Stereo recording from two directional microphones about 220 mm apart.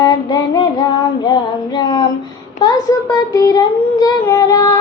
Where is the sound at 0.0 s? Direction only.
20° left (ahead or behind).